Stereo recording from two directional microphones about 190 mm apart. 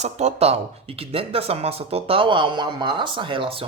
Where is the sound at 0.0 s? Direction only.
35° right (ahead or behind).